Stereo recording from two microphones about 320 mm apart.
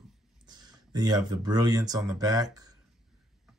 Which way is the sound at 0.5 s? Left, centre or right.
Centre.